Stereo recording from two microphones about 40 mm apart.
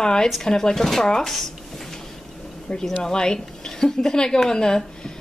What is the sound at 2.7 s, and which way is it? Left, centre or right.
Cutlery, left.